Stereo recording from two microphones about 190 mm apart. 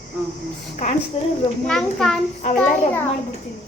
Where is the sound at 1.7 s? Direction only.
5° left (ahead or behind).